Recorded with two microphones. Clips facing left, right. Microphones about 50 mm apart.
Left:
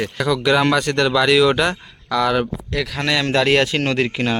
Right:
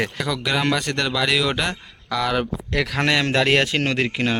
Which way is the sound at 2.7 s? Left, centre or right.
Right.